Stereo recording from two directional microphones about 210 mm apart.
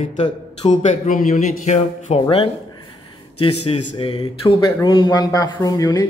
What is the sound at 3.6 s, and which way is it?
Speech, 25° left (ahead or behind).